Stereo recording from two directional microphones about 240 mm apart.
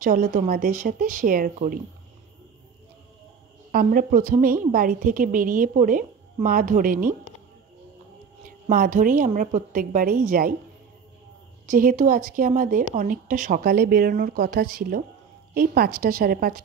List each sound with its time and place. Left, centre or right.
0.0 s speech: right
3.7 s speech: right
8.5 s speech: right
11.6 s speech: right